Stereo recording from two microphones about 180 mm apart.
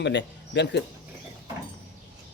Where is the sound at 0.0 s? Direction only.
75° left (ahead or behind).